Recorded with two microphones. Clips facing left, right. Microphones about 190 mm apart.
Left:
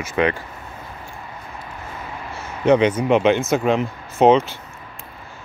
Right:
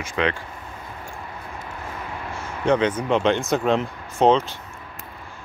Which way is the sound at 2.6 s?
10° left (ahead or behind).